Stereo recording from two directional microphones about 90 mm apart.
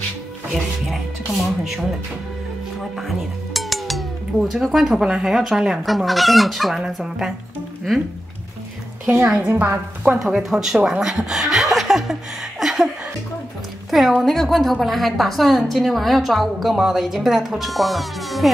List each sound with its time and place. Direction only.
0.8 s speech: centre (ahead or behind)
3.5 s speech: centre (ahead or behind)
9.3 s a woman's voice: 20° right (ahead or behind)
10.1 s a woman's voice: 5° right (ahead or behind)